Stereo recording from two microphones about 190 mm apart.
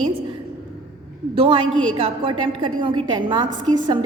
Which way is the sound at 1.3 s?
30° right (ahead or behind).